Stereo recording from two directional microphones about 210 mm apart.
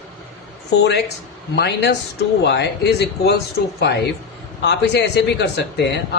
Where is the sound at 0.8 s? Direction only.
55° left (ahead or behind).